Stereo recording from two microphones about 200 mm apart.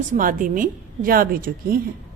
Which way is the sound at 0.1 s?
45° right (ahead or behind).